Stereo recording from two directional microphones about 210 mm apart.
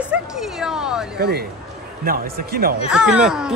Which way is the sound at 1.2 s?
50° right (ahead or behind).